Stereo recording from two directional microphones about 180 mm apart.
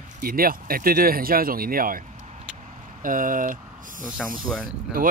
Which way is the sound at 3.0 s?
50° right (ahead or behind).